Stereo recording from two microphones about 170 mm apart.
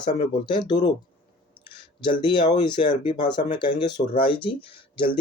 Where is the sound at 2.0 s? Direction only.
25° left (ahead or behind).